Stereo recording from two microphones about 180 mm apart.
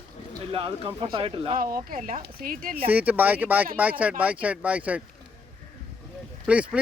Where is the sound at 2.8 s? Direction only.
10° right (ahead or behind).